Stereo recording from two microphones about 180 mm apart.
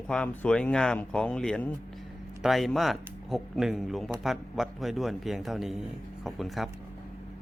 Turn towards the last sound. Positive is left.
turn(degrees=0)  # may be behind; listen again after turning